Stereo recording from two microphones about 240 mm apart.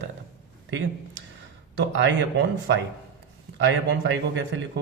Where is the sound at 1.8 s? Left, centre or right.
Right.